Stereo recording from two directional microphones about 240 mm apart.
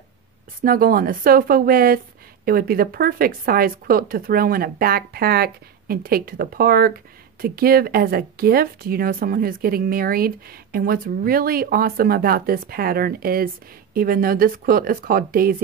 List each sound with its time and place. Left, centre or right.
0.6 s speech: right